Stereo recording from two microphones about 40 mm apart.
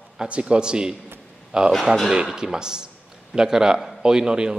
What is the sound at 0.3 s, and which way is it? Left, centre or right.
A man's voice, right.